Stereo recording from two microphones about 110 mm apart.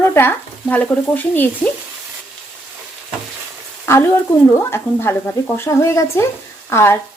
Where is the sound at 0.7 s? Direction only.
15° left (ahead or behind).